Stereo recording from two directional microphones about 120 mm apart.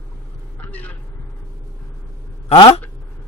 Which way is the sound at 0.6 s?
15° left (ahead or behind).